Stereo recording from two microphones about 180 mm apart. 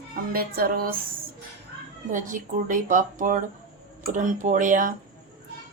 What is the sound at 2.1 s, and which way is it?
Speech, 45° right (ahead or behind).